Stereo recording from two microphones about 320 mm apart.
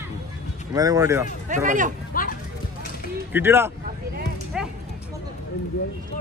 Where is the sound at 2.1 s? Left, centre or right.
Left.